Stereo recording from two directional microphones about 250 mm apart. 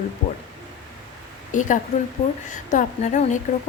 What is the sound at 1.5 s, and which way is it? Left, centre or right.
A woman's voice, left.